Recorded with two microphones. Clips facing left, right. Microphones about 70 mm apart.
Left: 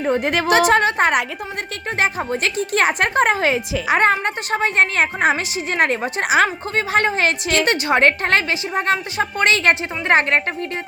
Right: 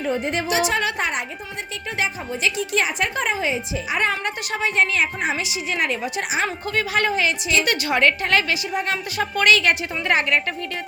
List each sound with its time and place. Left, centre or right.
0.4 s a woman's voice: left
2.0 s speech: left
4.0 s a woman's voice: left
6.7 s a woman's voice: left
7.2 s a woman's voice: left
7.6 s a woman's voice: left
9.1 s a woman's voice: left